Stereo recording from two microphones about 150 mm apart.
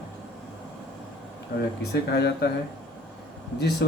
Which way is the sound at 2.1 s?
90° left.